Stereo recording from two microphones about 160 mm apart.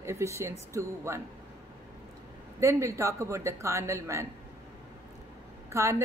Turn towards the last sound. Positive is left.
turn(degrees=-15)  # may be behind; listen again after turning